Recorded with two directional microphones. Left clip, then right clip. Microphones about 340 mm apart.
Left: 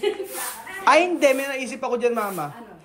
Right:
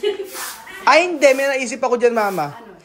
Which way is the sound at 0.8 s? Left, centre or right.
Centre.